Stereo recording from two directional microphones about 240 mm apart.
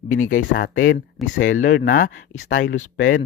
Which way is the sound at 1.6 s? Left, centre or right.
Left.